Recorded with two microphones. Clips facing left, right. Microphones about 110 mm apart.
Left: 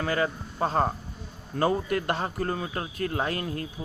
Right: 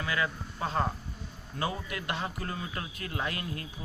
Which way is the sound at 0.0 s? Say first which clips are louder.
Left 5 dB; 40° left (ahead or behind).